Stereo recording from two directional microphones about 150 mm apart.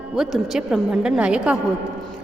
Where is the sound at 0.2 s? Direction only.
Centre (ahead or behind).